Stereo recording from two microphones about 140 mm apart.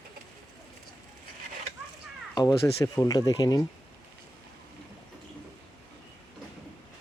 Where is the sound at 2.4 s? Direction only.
25° left (ahead or behind).